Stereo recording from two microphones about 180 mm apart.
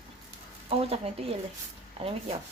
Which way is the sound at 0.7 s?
35° right (ahead or behind).